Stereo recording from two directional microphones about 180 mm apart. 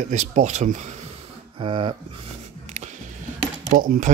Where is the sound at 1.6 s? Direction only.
30° right (ahead or behind).